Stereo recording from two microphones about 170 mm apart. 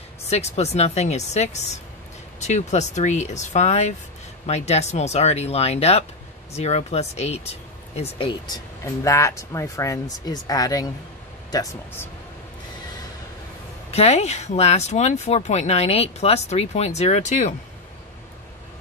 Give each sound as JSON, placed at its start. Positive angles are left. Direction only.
{"t": 0.3, "sound": "speech", "side_deg": 40}
{"t": 9.0, "sound": "speech", "side_deg": 15}
{"t": 13.9, "sound": "speech", "side_deg": 40}